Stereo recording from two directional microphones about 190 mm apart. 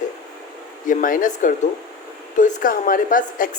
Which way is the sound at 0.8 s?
45° left (ahead or behind).